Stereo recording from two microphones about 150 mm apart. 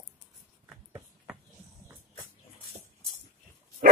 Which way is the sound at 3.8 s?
70° right (ahead or behind).